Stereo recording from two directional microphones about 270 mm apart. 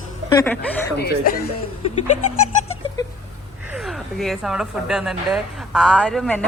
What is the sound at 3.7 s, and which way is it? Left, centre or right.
Speech, centre.